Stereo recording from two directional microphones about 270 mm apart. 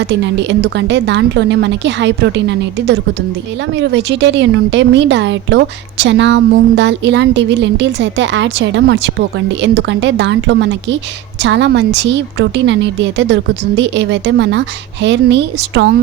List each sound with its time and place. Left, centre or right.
0.0 s a woman's voice: right